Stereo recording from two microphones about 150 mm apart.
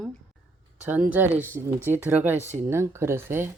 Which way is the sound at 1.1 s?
10° right (ahead or behind).